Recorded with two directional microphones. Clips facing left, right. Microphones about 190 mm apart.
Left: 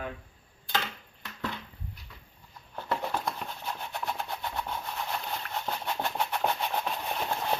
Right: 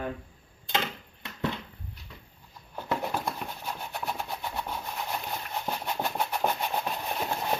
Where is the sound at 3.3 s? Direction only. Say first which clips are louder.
Right 1 dB; 5° right (ahead or behind).